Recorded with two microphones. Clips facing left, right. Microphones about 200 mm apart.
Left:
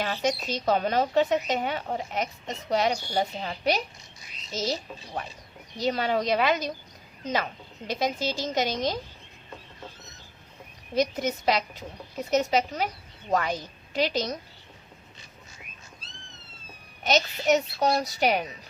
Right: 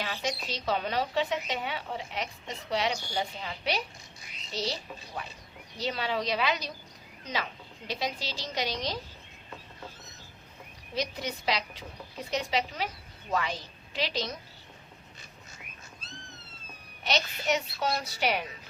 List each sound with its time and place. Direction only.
0.0 s a woman's voice: 45° left (ahead or behind)
7.9 s a woman's voice: 45° left (ahead or behind)
10.9 s a woman's voice: 45° left (ahead or behind)
17.0 s a child's voice: 40° left (ahead or behind)